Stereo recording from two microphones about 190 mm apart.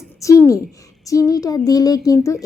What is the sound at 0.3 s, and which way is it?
A woman's voice, 15° left (ahead or behind).